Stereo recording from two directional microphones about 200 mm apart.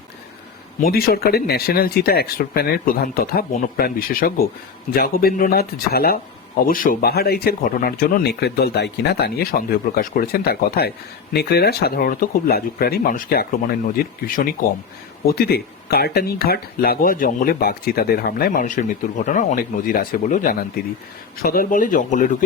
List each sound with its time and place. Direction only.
0.8 s speech: 50° left (ahead or behind)